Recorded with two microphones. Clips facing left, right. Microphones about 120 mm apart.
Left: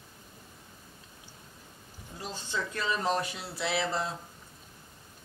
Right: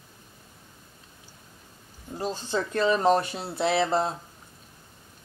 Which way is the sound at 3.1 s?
30° right (ahead or behind).